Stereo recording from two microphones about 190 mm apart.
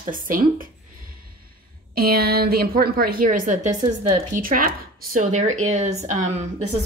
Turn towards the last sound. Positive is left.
turn(degrees=-40)  # may be behind; listen again after turning